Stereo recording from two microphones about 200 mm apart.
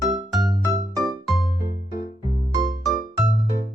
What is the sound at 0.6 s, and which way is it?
Music, 15° right (ahead or behind).